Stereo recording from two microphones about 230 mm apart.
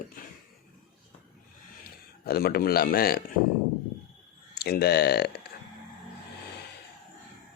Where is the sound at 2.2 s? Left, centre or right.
Left.